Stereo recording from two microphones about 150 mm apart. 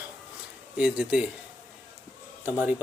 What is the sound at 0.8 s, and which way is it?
Speech, 5° right (ahead or behind).